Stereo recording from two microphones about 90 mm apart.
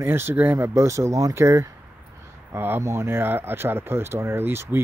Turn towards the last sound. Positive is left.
turn(degrees=-25)  # may be behind; listen again after turning